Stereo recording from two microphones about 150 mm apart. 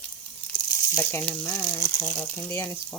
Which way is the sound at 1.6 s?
20° left (ahead or behind).